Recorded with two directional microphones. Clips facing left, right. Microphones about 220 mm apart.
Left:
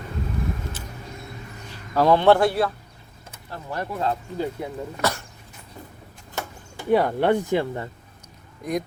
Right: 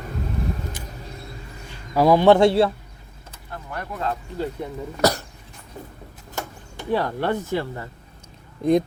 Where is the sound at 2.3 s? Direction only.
25° right (ahead or behind).